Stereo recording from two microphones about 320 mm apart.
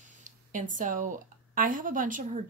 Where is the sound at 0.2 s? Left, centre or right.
Right.